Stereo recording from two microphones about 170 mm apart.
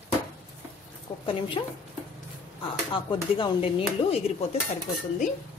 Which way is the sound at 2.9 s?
30° left (ahead or behind).